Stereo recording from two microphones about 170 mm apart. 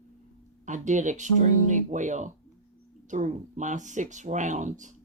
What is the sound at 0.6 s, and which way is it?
Speech, 45° right (ahead or behind).